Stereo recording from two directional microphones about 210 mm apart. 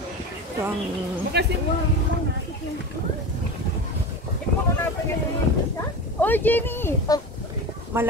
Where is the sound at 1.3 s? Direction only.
50° right (ahead or behind).